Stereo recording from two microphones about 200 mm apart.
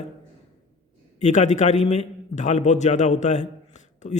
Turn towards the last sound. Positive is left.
turn(degrees=35)  # may be behind; listen again after turning